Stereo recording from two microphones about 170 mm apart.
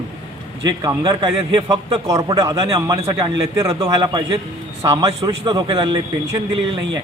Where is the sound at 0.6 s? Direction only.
25° right (ahead or behind).